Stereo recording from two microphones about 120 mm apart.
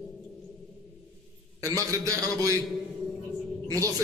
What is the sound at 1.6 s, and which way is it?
A man's voice, 25° right (ahead or behind).